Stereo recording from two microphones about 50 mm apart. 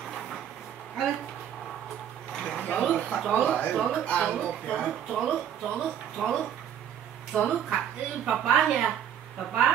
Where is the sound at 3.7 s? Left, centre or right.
Centre.